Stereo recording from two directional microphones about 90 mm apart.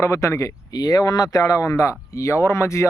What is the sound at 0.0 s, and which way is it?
Speech, 30° left (ahead or behind).